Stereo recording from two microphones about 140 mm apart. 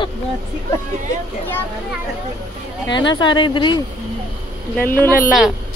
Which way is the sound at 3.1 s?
35° left (ahead or behind).